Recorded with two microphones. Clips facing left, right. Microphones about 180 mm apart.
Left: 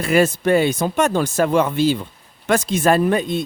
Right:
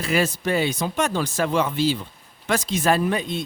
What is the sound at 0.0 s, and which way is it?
Speech, 55° left (ahead or behind).